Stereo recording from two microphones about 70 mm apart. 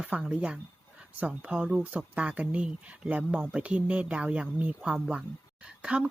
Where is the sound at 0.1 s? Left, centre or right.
Centre.